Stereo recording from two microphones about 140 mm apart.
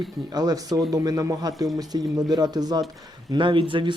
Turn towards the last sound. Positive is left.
turn(degrees=-35)  # may be behind; listen again after turning